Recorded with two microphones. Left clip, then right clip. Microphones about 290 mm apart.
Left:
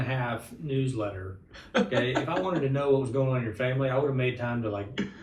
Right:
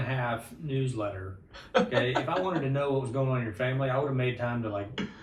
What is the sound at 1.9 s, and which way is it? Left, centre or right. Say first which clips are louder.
Speech: even; centre.